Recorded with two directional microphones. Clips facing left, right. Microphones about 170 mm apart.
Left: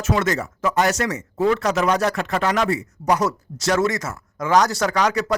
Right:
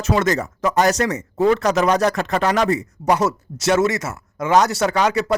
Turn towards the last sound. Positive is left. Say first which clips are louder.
# right 2 dB
turn(degrees=-25)  # may be behind; listen again after turning